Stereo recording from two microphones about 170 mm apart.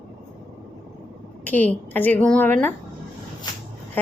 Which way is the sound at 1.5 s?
10° left (ahead or behind).